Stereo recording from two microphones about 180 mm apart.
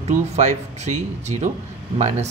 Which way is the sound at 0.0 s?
40° right (ahead or behind).